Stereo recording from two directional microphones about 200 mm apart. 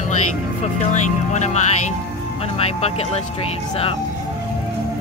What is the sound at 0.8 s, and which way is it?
Speech, 35° left (ahead or behind).